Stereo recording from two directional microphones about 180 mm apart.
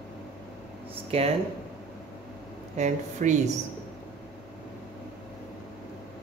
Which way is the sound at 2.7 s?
40° right (ahead or behind).